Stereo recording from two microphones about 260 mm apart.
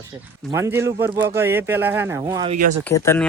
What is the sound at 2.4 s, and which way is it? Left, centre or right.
Speech, right.